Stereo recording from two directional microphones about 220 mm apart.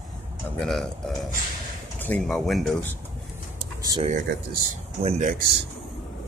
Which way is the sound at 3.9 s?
20° right (ahead or behind).